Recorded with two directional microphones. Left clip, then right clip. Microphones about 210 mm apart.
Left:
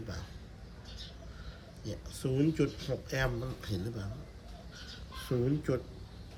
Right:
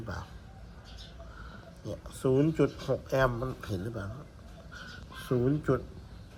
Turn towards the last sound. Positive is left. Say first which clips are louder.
# right 4 dB
turn(degrees=0)  # may be behind; listen again after turning